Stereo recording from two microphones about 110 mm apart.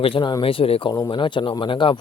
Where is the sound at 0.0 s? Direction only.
50° left (ahead or behind).